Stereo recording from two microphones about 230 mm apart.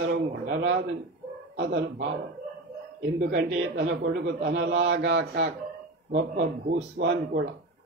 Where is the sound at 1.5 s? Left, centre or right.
Right.